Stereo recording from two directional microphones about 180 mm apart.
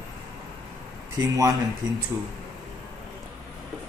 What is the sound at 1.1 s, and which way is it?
Speech, 20° right (ahead or behind).